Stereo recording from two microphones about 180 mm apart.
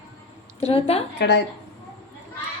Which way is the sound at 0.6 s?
35° left (ahead or behind).